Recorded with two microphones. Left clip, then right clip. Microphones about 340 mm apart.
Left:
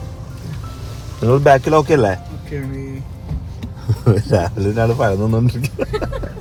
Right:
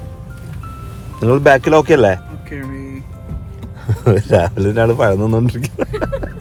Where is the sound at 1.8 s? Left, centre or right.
Right.